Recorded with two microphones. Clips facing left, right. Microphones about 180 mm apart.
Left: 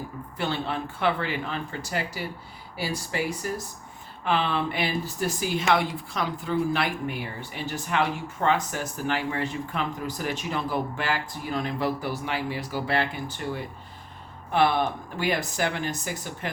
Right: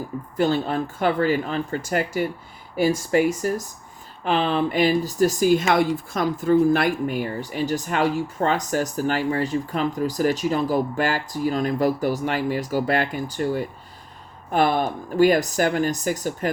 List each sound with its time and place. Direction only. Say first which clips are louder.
0.3 s speech: right 8 dB; 40° right (ahead or behind)